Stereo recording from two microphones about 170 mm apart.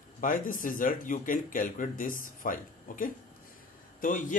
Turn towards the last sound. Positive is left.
turn(degrees=50)  # may be behind; listen again after turning